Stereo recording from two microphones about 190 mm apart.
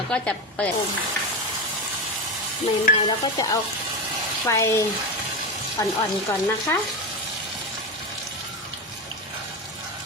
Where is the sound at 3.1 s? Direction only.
20° left (ahead or behind).